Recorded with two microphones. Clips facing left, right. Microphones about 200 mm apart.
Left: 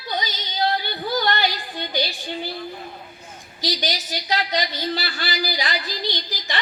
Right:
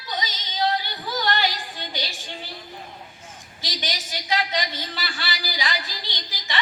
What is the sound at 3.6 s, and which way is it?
A woman's voice, 40° left (ahead or behind).